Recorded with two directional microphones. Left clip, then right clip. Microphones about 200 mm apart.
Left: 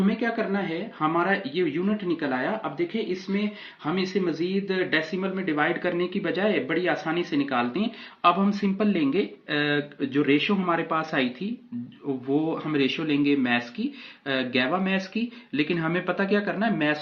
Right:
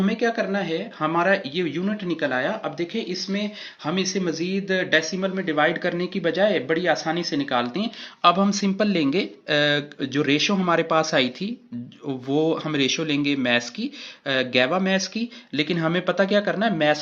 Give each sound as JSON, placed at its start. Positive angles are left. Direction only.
{"t": 0.2, "sound": "speech", "side_deg": -45}